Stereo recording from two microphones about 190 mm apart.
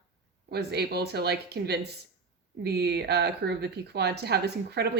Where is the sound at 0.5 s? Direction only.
60° right (ahead or behind).